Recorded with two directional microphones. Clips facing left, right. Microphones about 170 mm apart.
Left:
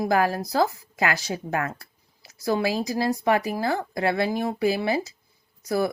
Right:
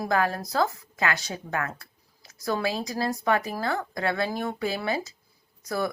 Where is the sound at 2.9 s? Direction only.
30° left (ahead or behind).